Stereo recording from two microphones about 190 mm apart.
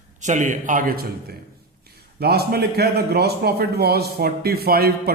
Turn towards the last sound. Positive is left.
turn(degrees=-55)  # may be behind; listen again after turning